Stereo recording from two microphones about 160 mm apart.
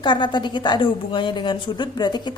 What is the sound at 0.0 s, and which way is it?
A woman's voice, 30° left (ahead or behind).